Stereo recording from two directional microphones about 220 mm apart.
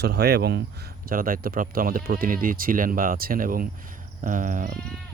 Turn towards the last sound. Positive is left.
turn(degrees=-40)  # may be behind; listen again after turning